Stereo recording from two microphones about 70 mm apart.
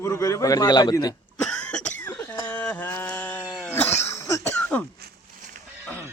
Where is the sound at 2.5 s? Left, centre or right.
Left.